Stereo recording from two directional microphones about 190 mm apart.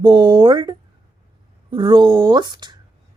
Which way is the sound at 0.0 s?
25° right (ahead or behind).